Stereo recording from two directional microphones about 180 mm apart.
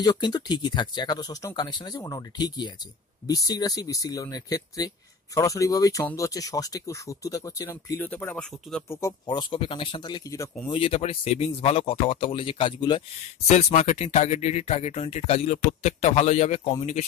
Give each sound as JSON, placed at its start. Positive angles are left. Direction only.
{"t": 0.0, "sound": "speech", "side_deg": 20}
{"t": 8.8, "sound": "speech", "side_deg": 15}
{"t": 10.7, "sound": "speech", "side_deg": 30}